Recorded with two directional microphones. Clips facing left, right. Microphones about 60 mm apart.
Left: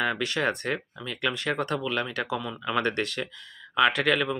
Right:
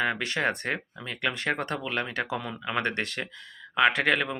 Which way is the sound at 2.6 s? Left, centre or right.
Right.